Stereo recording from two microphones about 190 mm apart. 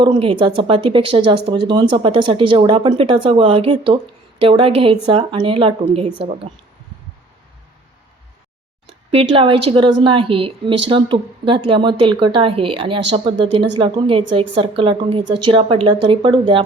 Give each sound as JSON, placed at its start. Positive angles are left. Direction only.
{"t": 0.0, "sound": "speech", "side_deg": -25}
{"t": 9.1, "sound": "speech", "side_deg": -30}